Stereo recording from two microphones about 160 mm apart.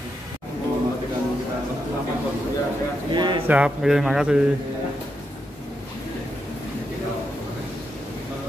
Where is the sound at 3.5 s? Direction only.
5° right (ahead or behind).